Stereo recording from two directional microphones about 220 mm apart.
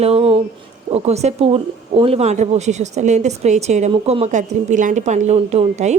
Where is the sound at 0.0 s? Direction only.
25° right (ahead or behind).